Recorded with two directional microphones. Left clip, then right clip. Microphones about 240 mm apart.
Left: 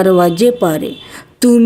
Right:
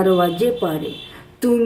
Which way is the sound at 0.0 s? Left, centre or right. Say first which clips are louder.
Left 6 dB; left.